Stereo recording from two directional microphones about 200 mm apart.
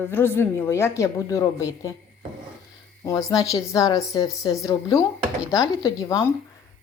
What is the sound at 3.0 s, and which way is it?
Speech, 15° left (ahead or behind).